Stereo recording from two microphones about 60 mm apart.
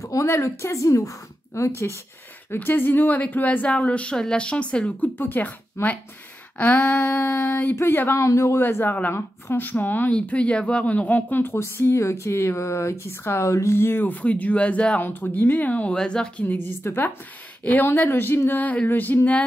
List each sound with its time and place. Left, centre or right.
0.0 s a sound: left
0.3 s a woman's voice: left
2.5 s speech: left; by 5.1 s centre
5.1 s speech: left
8.2 s a woman's voice: left
8.5 s speech: left
10.1 s speech: left
15.0 s speech: left; by 16.4 s centre
16.4 s speech: left
18.1 s speech: left